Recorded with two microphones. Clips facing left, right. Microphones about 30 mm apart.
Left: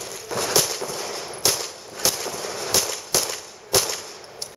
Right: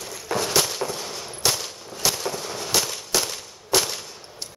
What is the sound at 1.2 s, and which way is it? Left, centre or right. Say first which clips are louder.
Machine gun: left 2 dB; centre.